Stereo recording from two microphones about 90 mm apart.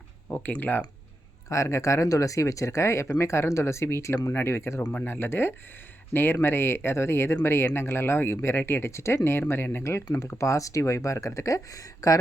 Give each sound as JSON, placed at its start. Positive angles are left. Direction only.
{"t": 0.3, "sound": "speech", "side_deg": 20}
{"t": 1.5, "sound": "speech", "side_deg": 35}
{"t": 4.9, "sound": "speech", "side_deg": 15}